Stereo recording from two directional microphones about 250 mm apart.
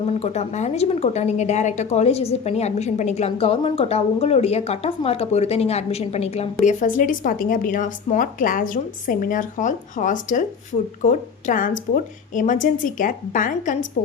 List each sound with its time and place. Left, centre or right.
0.2 s a woman's voice: left